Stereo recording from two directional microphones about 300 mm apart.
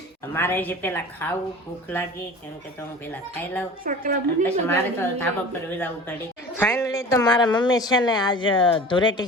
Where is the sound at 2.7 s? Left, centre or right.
Centre.